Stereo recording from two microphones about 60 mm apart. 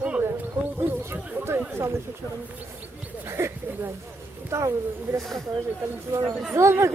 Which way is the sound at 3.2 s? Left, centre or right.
Right.